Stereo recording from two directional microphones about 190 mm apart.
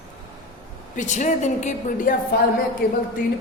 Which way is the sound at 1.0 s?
40° left (ahead or behind).